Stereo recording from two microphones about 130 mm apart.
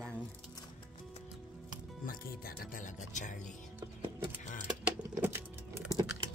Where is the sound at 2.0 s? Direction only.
90° left; by 3.3 s 75° left (ahead or behind).